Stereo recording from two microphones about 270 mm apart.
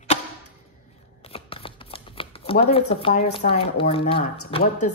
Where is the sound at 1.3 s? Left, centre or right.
Centre.